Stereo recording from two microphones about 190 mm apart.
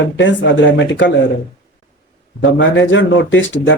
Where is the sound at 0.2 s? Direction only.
75° left (ahead or behind).